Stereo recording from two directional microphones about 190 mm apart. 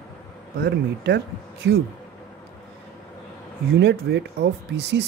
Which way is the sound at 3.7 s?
65° right (ahead or behind).